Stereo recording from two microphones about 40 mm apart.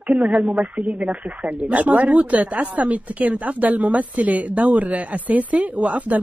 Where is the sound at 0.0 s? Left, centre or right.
Right.